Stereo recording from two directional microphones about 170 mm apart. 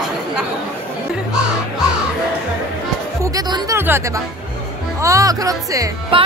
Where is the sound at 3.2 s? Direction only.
20° right (ahead or behind).